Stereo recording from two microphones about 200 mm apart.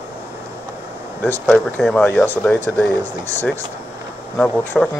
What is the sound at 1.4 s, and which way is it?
Speech, 5° left (ahead or behind).